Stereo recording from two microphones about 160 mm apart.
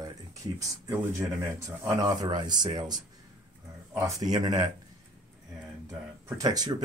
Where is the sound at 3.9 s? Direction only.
20° right (ahead or behind).